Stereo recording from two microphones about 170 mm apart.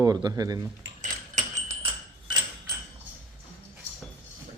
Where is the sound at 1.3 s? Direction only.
40° right (ahead or behind).